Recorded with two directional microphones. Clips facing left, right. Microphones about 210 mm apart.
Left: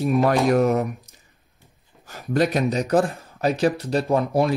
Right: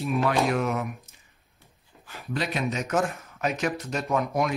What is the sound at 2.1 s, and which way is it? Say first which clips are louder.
Speech: left 9 dB; 45° left (ahead or behind).